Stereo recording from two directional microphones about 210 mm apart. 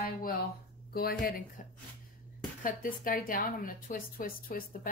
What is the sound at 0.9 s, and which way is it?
Speech, 45° left (ahead or behind).